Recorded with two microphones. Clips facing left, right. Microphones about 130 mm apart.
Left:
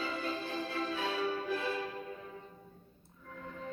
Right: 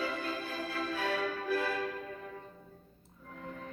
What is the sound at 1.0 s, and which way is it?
Music, 25° left (ahead or behind).